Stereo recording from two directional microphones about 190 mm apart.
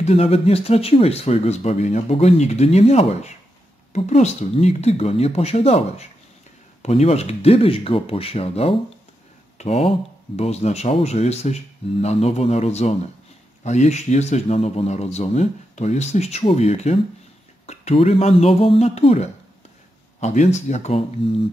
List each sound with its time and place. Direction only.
0.0 s speech: 35° left (ahead or behind)